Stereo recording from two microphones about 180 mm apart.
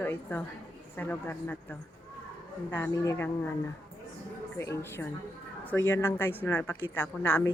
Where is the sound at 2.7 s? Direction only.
15° left (ahead or behind).